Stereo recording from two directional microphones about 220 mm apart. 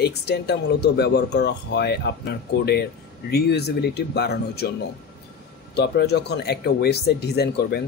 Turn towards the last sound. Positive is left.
turn(degrees=45)  # may be behind; listen again after turning